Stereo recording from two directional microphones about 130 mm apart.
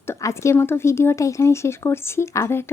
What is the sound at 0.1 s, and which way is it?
Speech, 20° left (ahead or behind).